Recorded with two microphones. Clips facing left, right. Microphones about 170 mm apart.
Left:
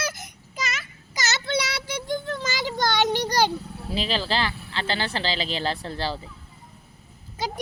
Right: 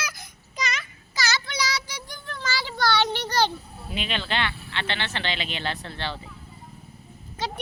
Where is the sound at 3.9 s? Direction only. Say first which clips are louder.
Left 3 dB; 35° left (ahead or behind).